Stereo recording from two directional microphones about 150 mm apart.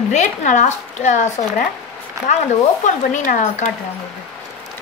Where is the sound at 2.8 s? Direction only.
55° left (ahead or behind).